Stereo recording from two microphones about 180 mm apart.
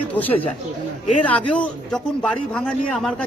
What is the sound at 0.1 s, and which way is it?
A man's voice, 10° left (ahead or behind).